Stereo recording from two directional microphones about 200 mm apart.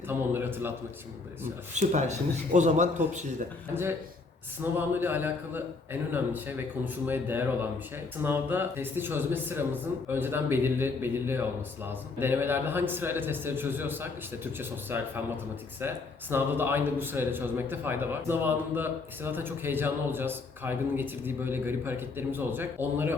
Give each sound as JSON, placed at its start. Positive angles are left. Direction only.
{"t": 0.1, "sound": "speech", "side_deg": -10}
{"t": 1.7, "sound": "speech", "side_deg": -35}
{"t": 4.6, "sound": "a man's voice", "side_deg": -10}
{"t": 16.3, "sound": "a man's voice", "side_deg": -10}